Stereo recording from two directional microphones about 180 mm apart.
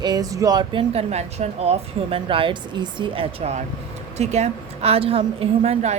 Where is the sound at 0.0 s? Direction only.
20° right (ahead or behind).